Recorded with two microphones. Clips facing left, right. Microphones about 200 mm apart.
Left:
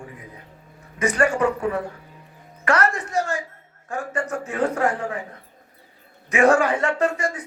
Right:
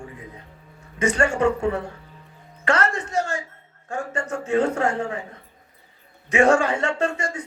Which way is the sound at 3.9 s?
25° right (ahead or behind).